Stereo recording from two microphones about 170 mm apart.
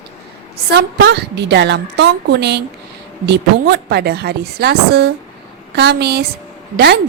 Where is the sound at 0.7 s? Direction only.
85° right.